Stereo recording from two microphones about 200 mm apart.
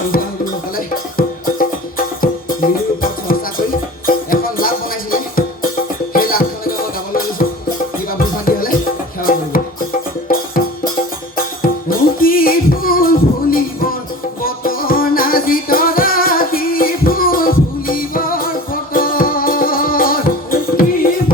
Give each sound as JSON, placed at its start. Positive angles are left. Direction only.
{"t": 1.1, "sound": "music", "side_deg": 45}
{"t": 6.1, "sound": "music", "side_deg": 45}
{"t": 11.3, "sound": "music", "side_deg": 45}